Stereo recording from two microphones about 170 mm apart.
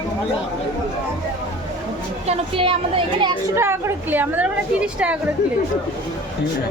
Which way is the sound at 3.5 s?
15° right (ahead or behind).